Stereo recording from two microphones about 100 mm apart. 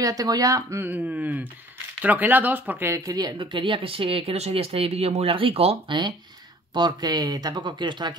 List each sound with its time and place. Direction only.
0.0 s speech: 40° right (ahead or behind)
0.8 s speech: 15° right (ahead or behind)
2.9 s speech: 40° right (ahead or behind); by 5.9 s 70° right (ahead or behind)
6.7 s speech: 50° right (ahead or behind)